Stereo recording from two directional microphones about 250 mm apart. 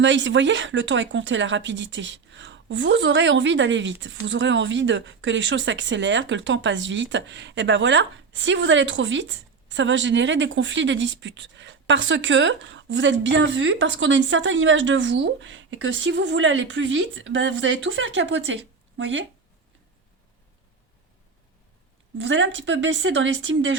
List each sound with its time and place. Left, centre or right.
0.0 s speech: right
22.2 s speech: right